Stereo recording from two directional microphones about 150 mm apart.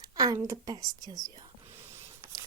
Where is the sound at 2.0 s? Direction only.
20° right (ahead or behind).